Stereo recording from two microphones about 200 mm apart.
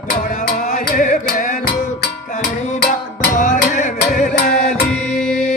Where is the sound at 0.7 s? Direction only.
40° left (ahead or behind).